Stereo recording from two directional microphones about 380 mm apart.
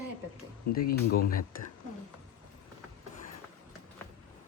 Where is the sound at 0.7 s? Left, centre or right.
Left.